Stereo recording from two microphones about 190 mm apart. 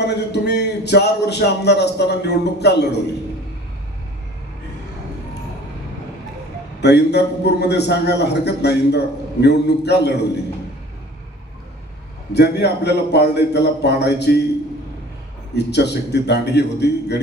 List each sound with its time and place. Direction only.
0.0 s a man's voice: 60° left (ahead or behind)
6.8 s a man's voice: 60° left (ahead or behind)
12.4 s a man's voice: 60° left (ahead or behind)
15.5 s a man's voice: 60° left (ahead or behind)